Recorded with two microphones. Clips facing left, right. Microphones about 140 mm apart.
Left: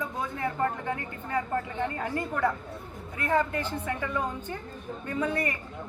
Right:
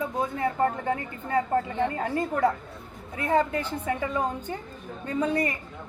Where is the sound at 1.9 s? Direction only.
20° right (ahead or behind).